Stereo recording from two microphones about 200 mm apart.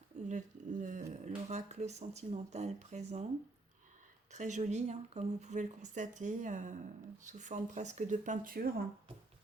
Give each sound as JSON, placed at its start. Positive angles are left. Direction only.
{"t": 0.3, "sound": "a sound", "side_deg": -40}
{"t": 1.5, "sound": "speech", "side_deg": -35}
{"t": 4.3, "sound": "speech", "side_deg": -35}